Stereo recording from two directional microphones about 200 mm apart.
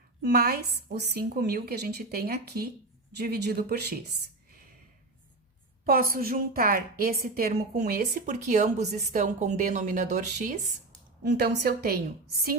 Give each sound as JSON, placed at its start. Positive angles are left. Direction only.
{"t": 0.2, "sound": "a woman's voice", "side_deg": -50}
{"t": 5.8, "sound": "a woman's voice", "side_deg": -45}
{"t": 11.2, "sound": "a woman's voice", "side_deg": -55}